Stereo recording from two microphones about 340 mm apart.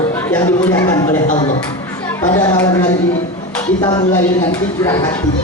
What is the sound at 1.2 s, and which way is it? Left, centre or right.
Speech, centre.